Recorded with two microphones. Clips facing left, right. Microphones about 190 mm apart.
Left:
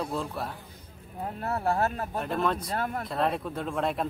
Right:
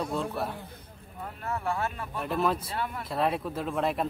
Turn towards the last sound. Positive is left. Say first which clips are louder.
# even
turn(degrees=0)  # may be behind; listen again after turning